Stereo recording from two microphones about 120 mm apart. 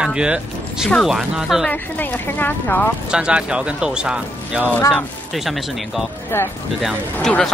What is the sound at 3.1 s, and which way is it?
Speech, 10° right (ahead or behind).